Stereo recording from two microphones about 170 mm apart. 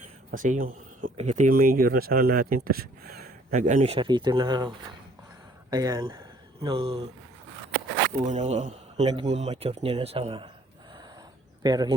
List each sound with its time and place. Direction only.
0.3 s speech: 50° right (ahead or behind)
1.1 s speech: 40° right (ahead or behind); by 3.2 s 65° right (ahead or behind)
3.5 s speech: 45° right (ahead or behind); by 4.7 s 25° right (ahead or behind)
5.7 s speech: 20° right (ahead or behind)
8.2 s speech: 40° right (ahead or behind)
11.6 s speech: 25° right (ahead or behind)